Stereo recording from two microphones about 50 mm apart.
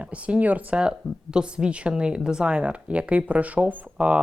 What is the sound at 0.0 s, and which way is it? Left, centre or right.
Speech, right.